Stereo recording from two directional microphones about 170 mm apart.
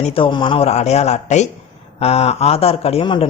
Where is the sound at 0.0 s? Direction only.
30° left (ahead or behind).